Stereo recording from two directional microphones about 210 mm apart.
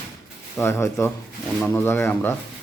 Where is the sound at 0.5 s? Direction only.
10° left (ahead or behind).